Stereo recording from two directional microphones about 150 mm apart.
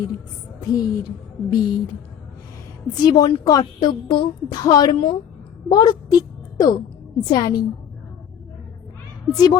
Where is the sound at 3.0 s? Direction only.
25° left (ahead or behind).